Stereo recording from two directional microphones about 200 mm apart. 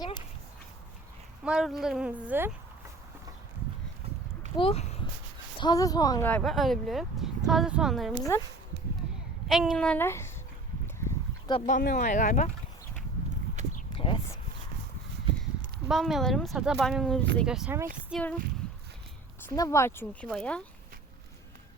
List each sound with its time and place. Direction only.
1.5 s speech: 5° right (ahead or behind)
4.5 s speech: 30° left (ahead or behind)
5.5 s a woman's voice: 20° left (ahead or behind)
6.2 s speech: 5° left (ahead or behind)
8.3 s speech: 15° left (ahead or behind)
9.5 s speech: centre (ahead or behind)
11.0 s a sound: 20° left (ahead or behind)
11.8 s speech: 40° left (ahead or behind)
13.9 s a sound: 25° left (ahead or behind)
15.9 s speech: centre (ahead or behind)
18.1 s speech: 5° left (ahead or behind)
19.5 s speech: 15° left (ahead or behind)
20.2 s speech: 5° left (ahead or behind)